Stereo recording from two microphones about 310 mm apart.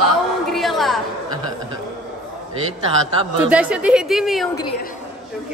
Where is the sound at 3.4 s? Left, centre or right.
Centre.